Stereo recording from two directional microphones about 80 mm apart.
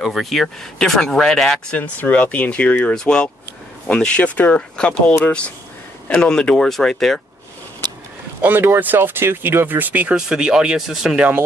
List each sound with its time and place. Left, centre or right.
0.0 s speech: centre
1.8 s speech: centre
8.4 s speech: right
10.1 s speech: centre